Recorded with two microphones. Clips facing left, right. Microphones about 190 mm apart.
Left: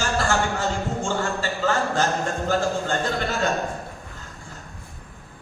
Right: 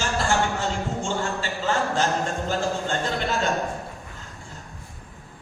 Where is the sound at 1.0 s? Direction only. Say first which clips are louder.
Left 2 dB; 45° left (ahead or behind).